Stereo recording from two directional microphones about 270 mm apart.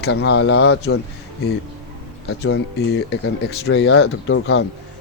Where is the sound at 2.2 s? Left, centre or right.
Left.